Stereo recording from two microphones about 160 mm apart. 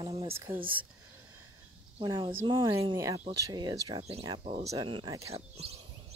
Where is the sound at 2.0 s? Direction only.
25° right (ahead or behind).